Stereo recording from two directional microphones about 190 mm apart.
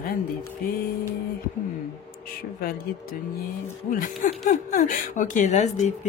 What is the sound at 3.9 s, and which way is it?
Speech, 45° left (ahead or behind).